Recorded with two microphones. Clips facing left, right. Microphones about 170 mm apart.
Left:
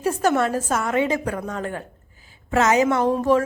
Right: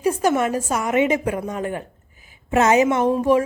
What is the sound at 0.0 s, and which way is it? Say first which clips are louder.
A woman's voice: right 1 dB; 10° right (ahead or behind).